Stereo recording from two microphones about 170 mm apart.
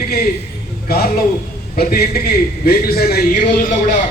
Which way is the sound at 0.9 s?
65° left (ahead or behind).